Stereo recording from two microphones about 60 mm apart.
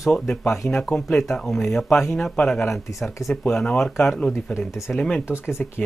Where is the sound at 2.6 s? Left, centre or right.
Left.